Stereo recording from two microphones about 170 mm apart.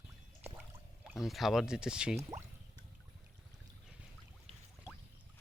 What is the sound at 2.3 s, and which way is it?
Speech, 20° right (ahead or behind).